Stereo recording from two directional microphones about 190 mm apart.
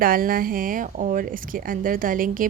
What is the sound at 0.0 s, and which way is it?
A woman's voice, 50° right (ahead or behind).